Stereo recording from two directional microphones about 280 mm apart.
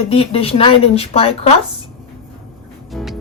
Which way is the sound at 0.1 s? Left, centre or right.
Centre.